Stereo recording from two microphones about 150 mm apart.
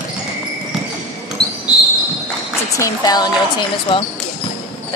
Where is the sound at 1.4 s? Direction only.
5° left (ahead or behind).